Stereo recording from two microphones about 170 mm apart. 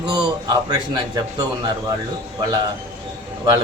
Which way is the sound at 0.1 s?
25° right (ahead or behind).